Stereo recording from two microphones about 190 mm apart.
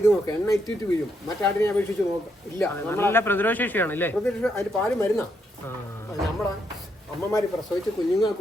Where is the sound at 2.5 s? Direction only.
10° left (ahead or behind).